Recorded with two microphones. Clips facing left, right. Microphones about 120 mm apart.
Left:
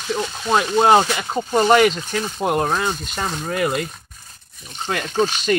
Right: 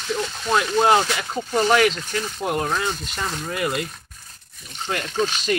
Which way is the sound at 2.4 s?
45° left (ahead or behind).